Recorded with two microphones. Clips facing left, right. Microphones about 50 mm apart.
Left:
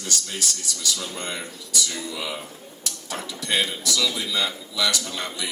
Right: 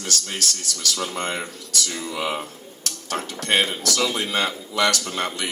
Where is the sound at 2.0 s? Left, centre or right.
Right.